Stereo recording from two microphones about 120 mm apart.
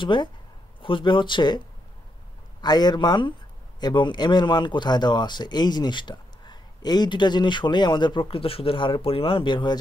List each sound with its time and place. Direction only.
0.0 s a man's voice: 40° left (ahead or behind)
2.6 s a man's voice: 35° left (ahead or behind)